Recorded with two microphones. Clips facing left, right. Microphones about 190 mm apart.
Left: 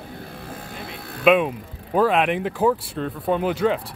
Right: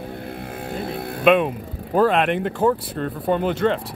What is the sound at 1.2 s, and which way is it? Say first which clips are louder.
Speech: right 1 dB; centre (ahead or behind).